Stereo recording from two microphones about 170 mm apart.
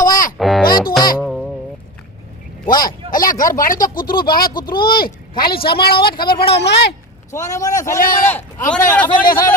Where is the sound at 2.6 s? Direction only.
25° left (ahead or behind).